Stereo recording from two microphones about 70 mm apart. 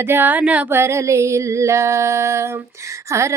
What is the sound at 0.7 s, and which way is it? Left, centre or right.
Music, right.